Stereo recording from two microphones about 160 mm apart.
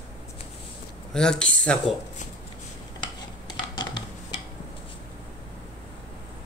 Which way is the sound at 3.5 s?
25° left (ahead or behind).